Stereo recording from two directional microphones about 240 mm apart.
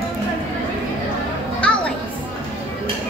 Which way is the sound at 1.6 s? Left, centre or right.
Centre.